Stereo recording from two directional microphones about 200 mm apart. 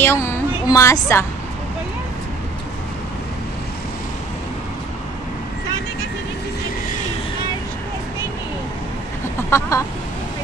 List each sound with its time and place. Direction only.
0.0 s a woman's voice: 15° left (ahead or behind)
9.5 s speech: 15° left (ahead or behind)